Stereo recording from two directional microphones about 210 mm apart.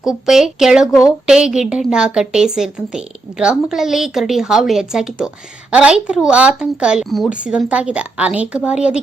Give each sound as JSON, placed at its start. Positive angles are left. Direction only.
{"t": 0.0, "sound": "a woman's voice", "side_deg": 0}
{"t": 0.9, "sound": "a woman's voice", "side_deg": 15}
{"t": 1.3, "sound": "a woman's voice", "side_deg": -5}